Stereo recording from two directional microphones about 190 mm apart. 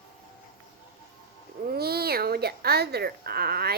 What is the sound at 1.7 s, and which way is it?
Speech, 55° right (ahead or behind).